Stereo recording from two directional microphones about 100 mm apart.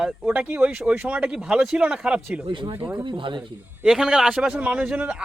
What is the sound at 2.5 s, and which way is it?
Speech, 55° right (ahead or behind).